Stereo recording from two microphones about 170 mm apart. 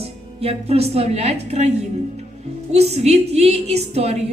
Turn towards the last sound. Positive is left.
turn(degrees=-40)  # may be behind; listen again after turning